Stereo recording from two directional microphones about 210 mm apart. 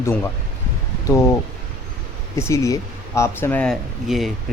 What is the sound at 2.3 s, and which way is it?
Speech, 15° left (ahead or behind).